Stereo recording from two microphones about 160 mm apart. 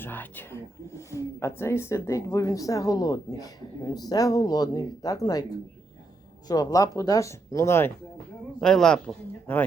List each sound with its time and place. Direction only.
0.0 s speech: 10° left (ahead or behind)
8.6 s speech: 5° left (ahead or behind)